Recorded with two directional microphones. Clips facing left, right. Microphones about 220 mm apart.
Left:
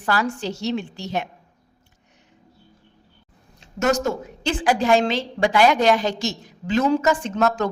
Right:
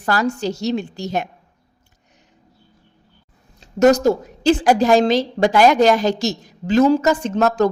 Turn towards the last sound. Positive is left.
turn(degrees=-40)  # may be behind; listen again after turning